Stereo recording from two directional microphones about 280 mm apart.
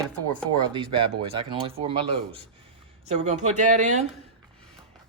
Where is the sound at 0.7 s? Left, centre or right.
Centre.